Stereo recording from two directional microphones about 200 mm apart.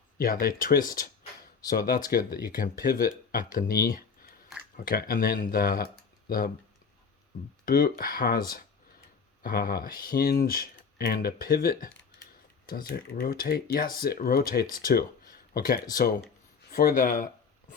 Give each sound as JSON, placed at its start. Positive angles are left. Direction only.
{"t": 0.2, "sound": "speech", "side_deg": 45}
{"t": 2.0, "sound": "speech", "side_deg": 45}
{"t": 7.6, "sound": "speech", "side_deg": 45}